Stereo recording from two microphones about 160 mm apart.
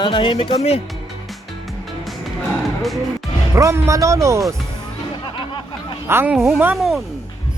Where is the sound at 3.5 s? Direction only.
20° right (ahead or behind).